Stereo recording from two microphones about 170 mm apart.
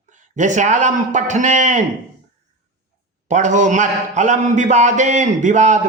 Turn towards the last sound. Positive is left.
turn(degrees=-45)  # may be behind; listen again after turning